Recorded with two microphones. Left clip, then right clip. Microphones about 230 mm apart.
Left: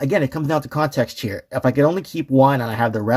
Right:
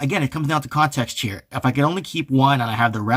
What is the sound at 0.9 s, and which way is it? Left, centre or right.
Speech, right.